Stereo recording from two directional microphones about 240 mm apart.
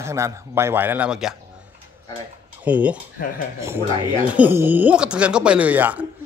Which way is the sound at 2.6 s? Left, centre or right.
Centre.